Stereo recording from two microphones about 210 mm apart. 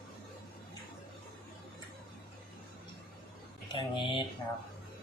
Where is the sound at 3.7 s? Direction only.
25° left (ahead or behind).